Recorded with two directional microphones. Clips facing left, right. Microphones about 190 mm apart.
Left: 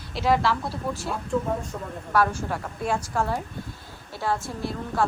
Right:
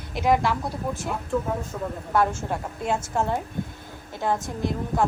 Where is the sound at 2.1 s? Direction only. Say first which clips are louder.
Even; 20° right (ahead or behind).